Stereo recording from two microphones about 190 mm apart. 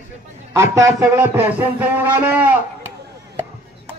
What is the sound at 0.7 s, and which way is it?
A man's voice, 15° right (ahead or behind).